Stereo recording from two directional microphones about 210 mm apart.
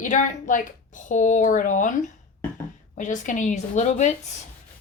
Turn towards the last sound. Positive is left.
turn(degrees=35)  # may be behind; listen again after turning